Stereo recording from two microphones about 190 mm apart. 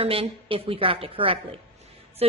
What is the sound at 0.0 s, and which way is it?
A woman's voice, 30° right (ahead or behind).